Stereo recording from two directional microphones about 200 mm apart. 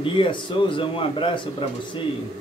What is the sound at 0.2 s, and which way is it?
Speech, 25° left (ahead or behind).